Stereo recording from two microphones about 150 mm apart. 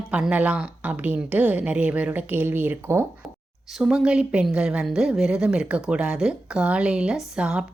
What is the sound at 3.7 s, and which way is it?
A woman's voice, 5° right (ahead or behind).